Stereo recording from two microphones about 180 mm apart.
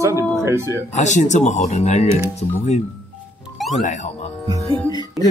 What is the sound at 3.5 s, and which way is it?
Music, centre (ahead or behind).